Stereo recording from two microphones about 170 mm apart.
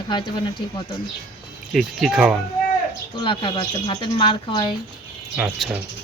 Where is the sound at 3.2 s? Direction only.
30° left (ahead or behind).